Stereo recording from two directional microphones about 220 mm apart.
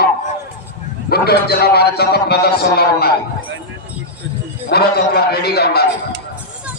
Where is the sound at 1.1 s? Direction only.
45° left (ahead or behind).